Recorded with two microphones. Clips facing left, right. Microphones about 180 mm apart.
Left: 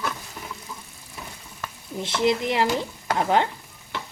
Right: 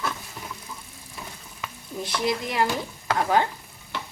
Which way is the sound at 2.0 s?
25° left (ahead or behind).